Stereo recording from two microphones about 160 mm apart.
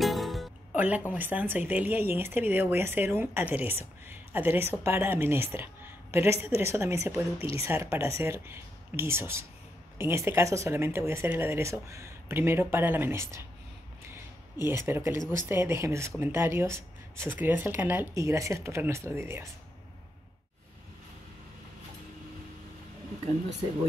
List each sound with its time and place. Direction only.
0.0 s music: centre (ahead or behind)
0.7 s speech: 10° right (ahead or behind)
14.6 s speech: 15° right (ahead or behind)